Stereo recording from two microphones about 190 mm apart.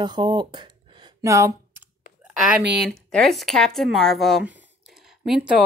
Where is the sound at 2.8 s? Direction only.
Centre (ahead or behind).